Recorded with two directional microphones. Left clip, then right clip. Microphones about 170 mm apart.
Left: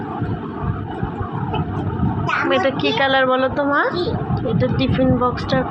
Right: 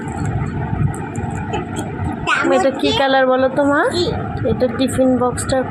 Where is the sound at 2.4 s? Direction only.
35° right (ahead or behind).